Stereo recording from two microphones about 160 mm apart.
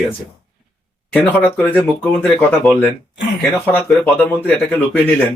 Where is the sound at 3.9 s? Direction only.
10° left (ahead or behind).